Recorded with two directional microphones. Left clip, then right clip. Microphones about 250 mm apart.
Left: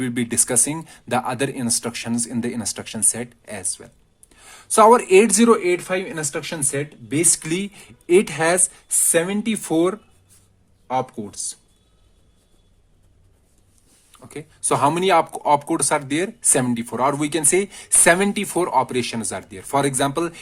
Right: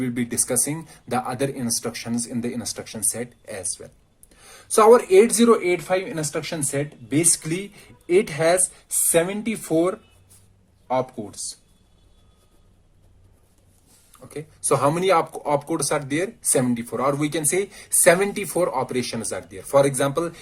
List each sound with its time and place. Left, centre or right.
0.0 s speech: left
14.2 s speech: left